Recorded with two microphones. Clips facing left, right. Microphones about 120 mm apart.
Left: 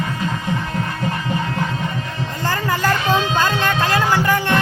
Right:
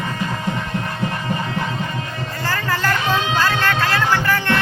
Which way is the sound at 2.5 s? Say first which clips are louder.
Left 2 dB; 15° left (ahead or behind).